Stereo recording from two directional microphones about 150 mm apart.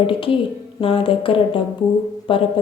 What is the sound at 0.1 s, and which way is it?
A woman's voice, 35° left (ahead or behind).